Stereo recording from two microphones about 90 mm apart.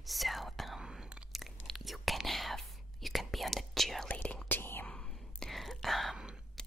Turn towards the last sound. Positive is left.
turn(degrees=-5)  # may be behind; listen again after turning